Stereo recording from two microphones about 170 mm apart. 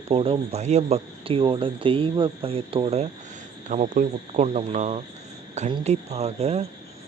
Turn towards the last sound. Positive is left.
turn(degrees=-40)  # may be behind; listen again after turning